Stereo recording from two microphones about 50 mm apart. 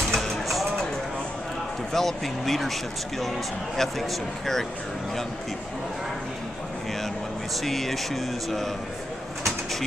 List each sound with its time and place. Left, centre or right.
0.1 s music: centre
1.9 s speech: centre
7.6 s speech: centre
9.4 s bird: centre